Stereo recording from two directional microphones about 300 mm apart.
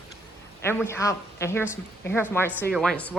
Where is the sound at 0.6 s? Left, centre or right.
Centre.